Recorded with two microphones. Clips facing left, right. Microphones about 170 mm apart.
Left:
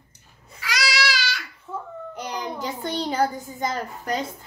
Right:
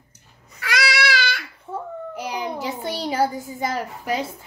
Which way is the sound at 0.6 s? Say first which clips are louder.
Right 3 dB; 55° right (ahead or behind).